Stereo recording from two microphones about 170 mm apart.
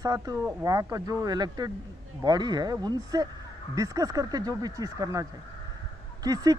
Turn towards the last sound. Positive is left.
turn(degrees=-20)  # may be behind; listen again after turning